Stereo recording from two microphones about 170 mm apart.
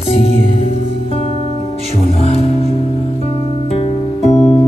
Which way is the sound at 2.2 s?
35° left (ahead or behind).